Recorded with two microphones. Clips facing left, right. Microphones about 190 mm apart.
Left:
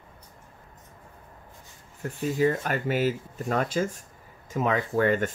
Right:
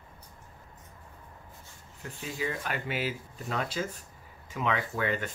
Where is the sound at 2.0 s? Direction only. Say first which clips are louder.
Left 11 dB; 45° left (ahead or behind).